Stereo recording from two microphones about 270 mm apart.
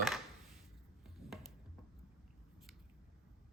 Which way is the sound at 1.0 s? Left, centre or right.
Centre.